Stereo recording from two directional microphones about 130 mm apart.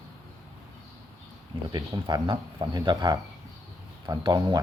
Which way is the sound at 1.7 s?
30° right (ahead or behind).